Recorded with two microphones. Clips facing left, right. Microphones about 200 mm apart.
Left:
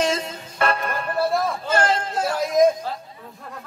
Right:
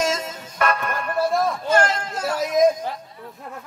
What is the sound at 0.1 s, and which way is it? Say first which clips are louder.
Music: left 1 dB; 30° left (ahead or behind).